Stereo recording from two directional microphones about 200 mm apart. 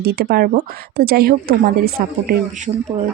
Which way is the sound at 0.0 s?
50° right (ahead or behind).